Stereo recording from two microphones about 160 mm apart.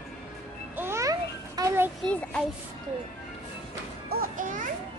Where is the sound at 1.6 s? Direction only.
25° right (ahead or behind).